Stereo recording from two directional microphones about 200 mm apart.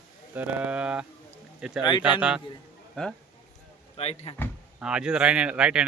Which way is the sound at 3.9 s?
30° left (ahead or behind).